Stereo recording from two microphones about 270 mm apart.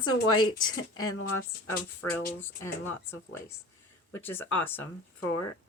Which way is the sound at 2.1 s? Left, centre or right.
Centre.